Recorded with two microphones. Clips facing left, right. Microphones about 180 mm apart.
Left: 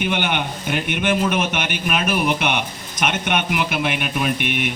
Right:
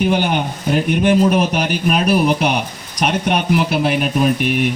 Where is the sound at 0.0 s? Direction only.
35° right (ahead or behind).